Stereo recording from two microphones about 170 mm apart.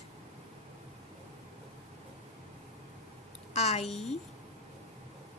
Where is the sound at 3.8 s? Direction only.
Centre (ahead or behind).